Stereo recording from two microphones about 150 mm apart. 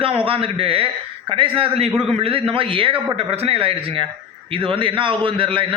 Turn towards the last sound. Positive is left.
turn(degrees=-35)  # may be behind; listen again after turning